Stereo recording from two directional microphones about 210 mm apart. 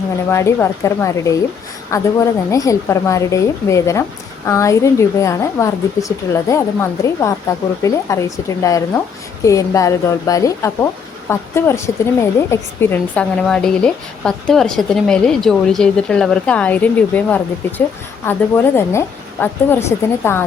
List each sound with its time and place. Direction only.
0.3 s a woman's voice: 10° left (ahead or behind)